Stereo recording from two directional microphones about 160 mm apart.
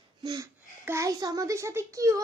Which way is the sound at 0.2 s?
20° right (ahead or behind).